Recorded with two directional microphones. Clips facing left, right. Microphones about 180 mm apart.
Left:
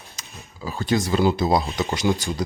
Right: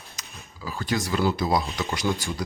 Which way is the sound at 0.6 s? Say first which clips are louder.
Left 5 dB; 25° left (ahead or behind).